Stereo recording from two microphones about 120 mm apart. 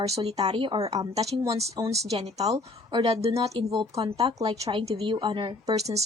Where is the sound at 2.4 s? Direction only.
30° right (ahead or behind).